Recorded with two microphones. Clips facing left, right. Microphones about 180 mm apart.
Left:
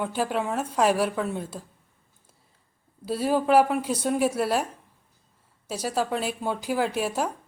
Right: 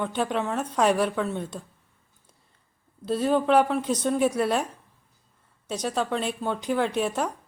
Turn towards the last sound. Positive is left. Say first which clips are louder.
# right 1 dB
turn(degrees=5)  # may be behind; listen again after turning